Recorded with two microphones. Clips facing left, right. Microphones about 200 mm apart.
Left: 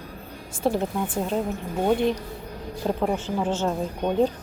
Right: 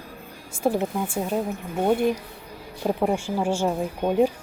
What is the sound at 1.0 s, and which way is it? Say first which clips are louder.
A woman's voice: even; 10° right (ahead or behind).